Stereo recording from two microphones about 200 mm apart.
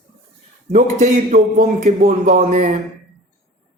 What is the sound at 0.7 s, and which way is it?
A man's voice, 35° right (ahead or behind).